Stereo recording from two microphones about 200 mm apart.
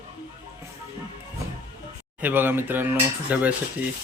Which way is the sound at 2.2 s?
10° right (ahead or behind).